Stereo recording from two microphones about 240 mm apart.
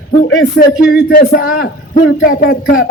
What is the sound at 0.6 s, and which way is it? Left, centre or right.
A man's voice, left.